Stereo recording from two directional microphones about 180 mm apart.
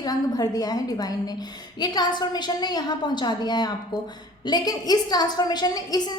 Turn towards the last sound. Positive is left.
turn(degrees=20)  # may be behind; listen again after turning